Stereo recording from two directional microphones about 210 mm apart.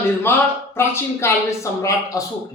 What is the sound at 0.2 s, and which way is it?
A woman's voice, 10° left (ahead or behind).